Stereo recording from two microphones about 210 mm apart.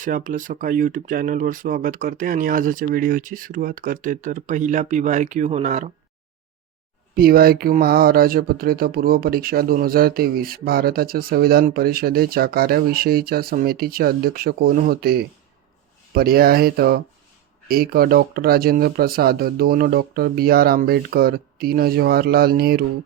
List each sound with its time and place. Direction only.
0.0 s speech: 40° right (ahead or behind)
7.2 s speech: 45° right (ahead or behind)